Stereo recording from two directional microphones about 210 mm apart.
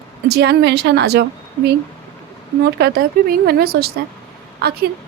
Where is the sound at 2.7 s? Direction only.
50° right (ahead or behind).